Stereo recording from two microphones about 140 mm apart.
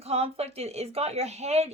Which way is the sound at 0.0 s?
45° right (ahead or behind).